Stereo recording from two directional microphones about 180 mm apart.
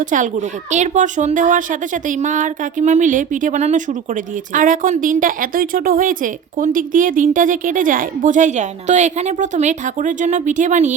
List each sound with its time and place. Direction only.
0.0 s speech: 45° right (ahead or behind)